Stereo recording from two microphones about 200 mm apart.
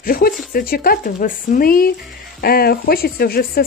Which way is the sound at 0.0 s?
45° left (ahead or behind).